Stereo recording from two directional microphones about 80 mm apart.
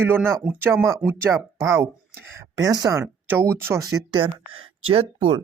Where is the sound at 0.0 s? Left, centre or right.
Right.